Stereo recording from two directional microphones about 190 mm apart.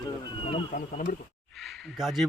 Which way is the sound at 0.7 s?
45° left (ahead or behind).